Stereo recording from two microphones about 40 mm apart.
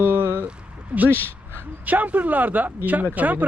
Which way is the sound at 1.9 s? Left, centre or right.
Right.